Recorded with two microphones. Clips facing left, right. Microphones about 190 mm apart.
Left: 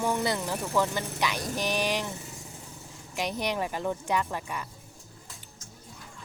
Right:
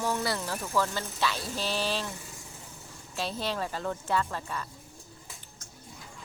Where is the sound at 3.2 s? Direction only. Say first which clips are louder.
Left 2 dB; 15° left (ahead or behind).